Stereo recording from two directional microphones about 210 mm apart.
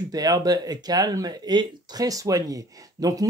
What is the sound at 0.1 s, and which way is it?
Speech, 15° right (ahead or behind).